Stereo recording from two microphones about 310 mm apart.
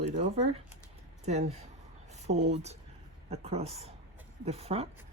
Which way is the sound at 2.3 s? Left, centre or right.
Right.